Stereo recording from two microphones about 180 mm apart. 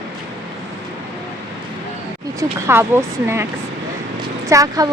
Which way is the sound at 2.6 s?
15° right (ahead or behind).